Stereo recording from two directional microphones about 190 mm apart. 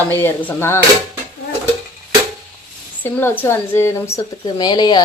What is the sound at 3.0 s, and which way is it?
A woman's voice, 10° left (ahead or behind).